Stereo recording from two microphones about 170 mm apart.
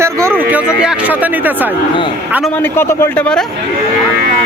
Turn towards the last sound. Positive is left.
turn(degrees=5)  # may be behind; listen again after turning